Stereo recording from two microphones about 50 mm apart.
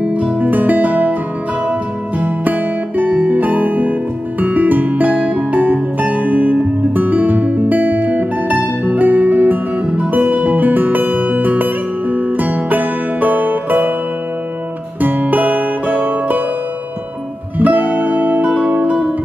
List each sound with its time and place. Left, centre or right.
0.0 s music: right
15.0 s music: right
17.6 s music: right